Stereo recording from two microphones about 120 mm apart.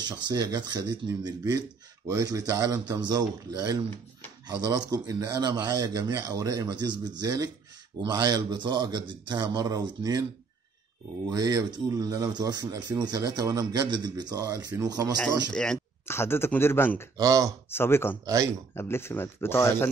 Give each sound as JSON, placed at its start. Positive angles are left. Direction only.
{"t": 0.0, "sound": "speech", "side_deg": -35}
{"t": 11.2, "sound": "speech", "side_deg": -30}
{"t": 15.5, "sound": "speech", "side_deg": 5}
{"t": 16.1, "sound": "speech", "side_deg": 20}
{"t": 17.2, "sound": "speech", "side_deg": -30}
{"t": 17.6, "sound": "speech", "side_deg": 20}
{"t": 18.2, "sound": "speech", "side_deg": -30}
{"t": 18.8, "sound": "speech", "side_deg": 20}